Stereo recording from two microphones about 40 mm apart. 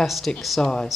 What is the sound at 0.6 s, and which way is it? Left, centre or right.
Speech, left.